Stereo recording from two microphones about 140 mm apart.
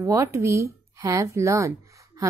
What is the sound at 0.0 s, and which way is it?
A woman's voice, 20° right (ahead or behind).